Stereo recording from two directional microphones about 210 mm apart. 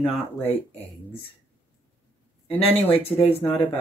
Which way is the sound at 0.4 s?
10° left (ahead or behind).